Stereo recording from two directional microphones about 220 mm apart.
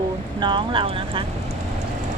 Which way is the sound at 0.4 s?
20° right (ahead or behind).